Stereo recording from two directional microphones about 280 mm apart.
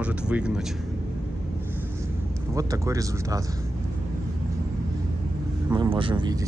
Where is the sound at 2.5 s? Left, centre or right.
Centre.